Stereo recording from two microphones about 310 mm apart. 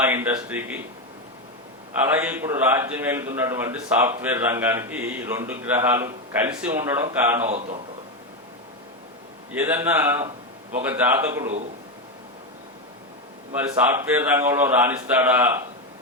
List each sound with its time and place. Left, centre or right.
0.0 s a man's voice: centre
2.0 s a man's voice: centre
7.4 s a man's voice: right
9.5 s a man's voice: centre
13.7 s a man's voice: centre